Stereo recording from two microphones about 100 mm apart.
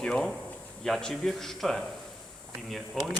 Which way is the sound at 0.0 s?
5° left (ahead or behind).